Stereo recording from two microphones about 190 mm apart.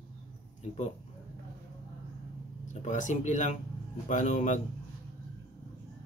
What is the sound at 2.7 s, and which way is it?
Speech, 40° left (ahead or behind).